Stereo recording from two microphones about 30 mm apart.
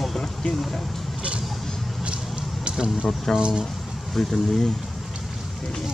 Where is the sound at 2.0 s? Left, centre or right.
Right.